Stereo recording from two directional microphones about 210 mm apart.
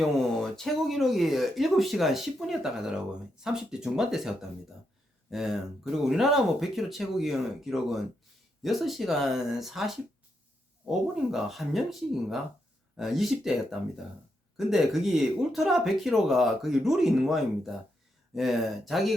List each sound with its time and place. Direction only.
0.3 s speech: centre (ahead or behind)